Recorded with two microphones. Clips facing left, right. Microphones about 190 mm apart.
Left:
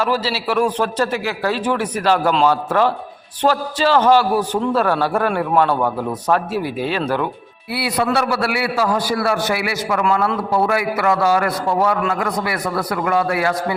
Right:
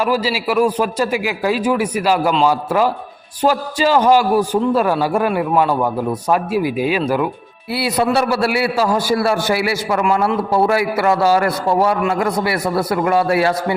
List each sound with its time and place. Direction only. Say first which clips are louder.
0.0 s a man's voice: right 2 dB; 10° right (ahead or behind)
7.7 s a man's voice: right 2 dB; 25° right (ahead or behind)